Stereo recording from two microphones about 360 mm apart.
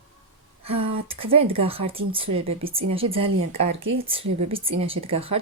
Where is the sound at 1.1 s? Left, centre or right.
Centre.